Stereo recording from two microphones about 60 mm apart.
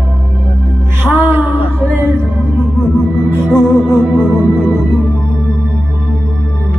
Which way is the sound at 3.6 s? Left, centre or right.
Centre.